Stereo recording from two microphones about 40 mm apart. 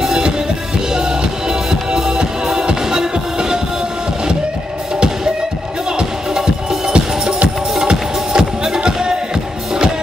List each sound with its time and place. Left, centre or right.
0.0 s music: centre
7.4 s music: centre